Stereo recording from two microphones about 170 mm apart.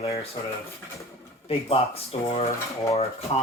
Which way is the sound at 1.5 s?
35° left (ahead or behind).